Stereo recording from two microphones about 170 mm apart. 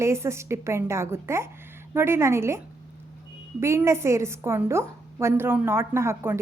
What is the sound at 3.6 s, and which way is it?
A woman's voice, 15° right (ahead or behind).